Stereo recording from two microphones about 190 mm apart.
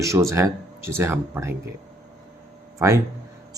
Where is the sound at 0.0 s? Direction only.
15° right (ahead or behind).